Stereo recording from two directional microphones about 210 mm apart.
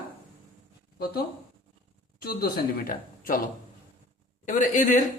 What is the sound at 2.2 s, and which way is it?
A woman's voice, 45° left (ahead or behind).